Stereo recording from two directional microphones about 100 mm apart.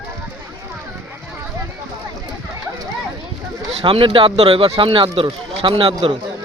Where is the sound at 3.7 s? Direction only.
75° right (ahead or behind).